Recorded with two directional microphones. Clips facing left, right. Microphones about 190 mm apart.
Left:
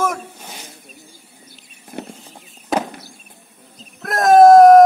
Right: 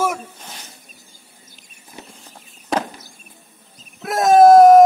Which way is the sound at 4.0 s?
5° right (ahead or behind).